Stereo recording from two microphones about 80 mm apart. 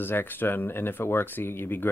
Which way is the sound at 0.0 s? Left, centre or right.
Left.